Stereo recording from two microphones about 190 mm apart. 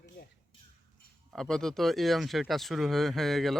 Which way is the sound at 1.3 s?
5° left (ahead or behind).